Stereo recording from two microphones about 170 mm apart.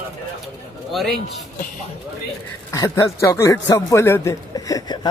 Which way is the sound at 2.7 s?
15° left (ahead or behind).